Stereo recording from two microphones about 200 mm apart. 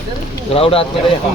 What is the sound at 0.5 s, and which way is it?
Speech, 30° left (ahead or behind).